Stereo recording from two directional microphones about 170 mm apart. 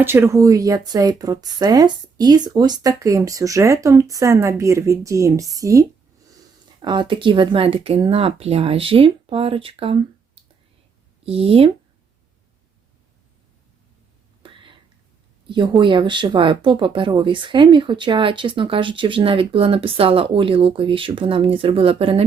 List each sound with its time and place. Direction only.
0.0 s a woman's voice: 15° right (ahead or behind); by 10.0 s 35° right (ahead or behind)
11.3 s speech: 35° right (ahead or behind)
14.4 s whispering: 30° right (ahead or behind)
15.4 s speech: 30° right (ahead or behind)